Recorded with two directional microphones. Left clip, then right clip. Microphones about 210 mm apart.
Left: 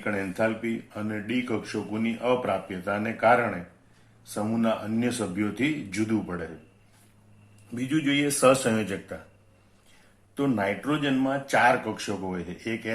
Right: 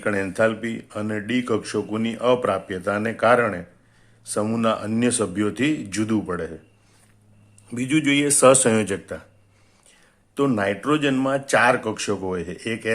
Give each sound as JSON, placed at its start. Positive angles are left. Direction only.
{"t": 0.0, "sound": "speech", "side_deg": -45}
{"t": 7.7, "sound": "speech", "side_deg": -40}
{"t": 10.3, "sound": "speech", "side_deg": -40}